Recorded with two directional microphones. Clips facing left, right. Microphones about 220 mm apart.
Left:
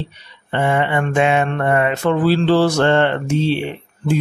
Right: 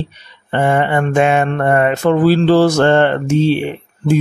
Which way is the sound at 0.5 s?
45° right (ahead or behind).